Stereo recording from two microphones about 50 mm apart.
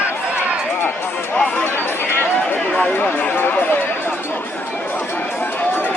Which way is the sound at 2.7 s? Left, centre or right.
Left.